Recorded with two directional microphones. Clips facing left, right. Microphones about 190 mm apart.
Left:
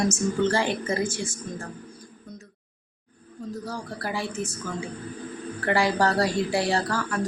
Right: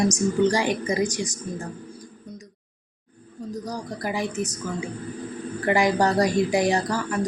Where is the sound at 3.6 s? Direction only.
15° right (ahead or behind).